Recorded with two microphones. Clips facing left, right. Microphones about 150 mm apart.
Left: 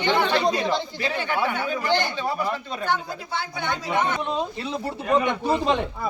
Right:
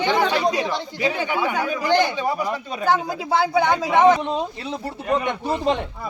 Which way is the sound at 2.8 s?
90° right.